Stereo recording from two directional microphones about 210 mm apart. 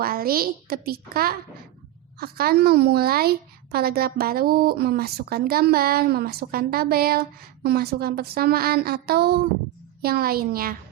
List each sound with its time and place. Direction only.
0.0 s a woman's voice: 45° right (ahead or behind)